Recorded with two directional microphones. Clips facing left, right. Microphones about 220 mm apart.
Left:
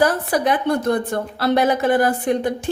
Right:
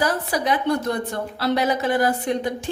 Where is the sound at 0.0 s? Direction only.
55° left (ahead or behind).